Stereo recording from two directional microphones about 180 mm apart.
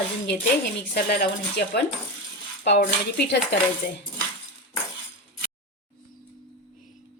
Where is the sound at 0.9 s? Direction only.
65° left (ahead or behind).